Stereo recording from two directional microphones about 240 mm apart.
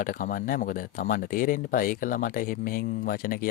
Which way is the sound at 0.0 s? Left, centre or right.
Left.